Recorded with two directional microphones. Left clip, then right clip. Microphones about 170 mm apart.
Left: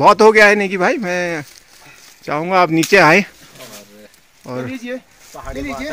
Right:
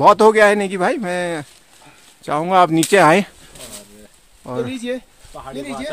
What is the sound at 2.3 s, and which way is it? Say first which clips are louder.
Speech: even; 5° left (ahead or behind).